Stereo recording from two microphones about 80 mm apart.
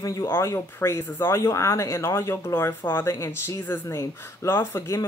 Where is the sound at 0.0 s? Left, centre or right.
Left.